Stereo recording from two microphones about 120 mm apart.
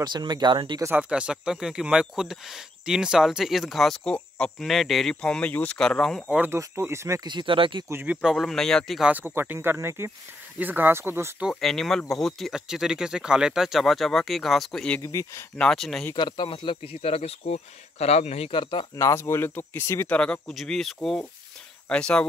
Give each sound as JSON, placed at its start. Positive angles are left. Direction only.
{"t": 0.0, "sound": "speech", "side_deg": -35}
{"t": 0.9, "sound": "speech", "side_deg": -10}
{"t": 6.4, "sound": "speech", "side_deg": -20}
{"t": 7.2, "sound": "speech", "side_deg": -40}
{"t": 7.9, "sound": "speech", "side_deg": -15}
{"t": 9.1, "sound": "speech", "side_deg": -20}
{"t": 11.4, "sound": "speech", "side_deg": 0}
{"t": 15.0, "sound": "speech", "side_deg": 25}
{"t": 15.5, "sound": "speech", "side_deg": 5}
{"t": 16.2, "sound": "speech", "side_deg": 40}
{"t": 18.5, "sound": "speech", "side_deg": 40}
{"t": 18.9, "sound": "speech", "side_deg": 25}
{"t": 20.2, "sound": "speech", "side_deg": 5}